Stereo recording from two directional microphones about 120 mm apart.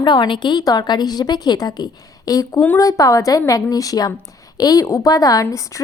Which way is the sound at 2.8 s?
30° left (ahead or behind).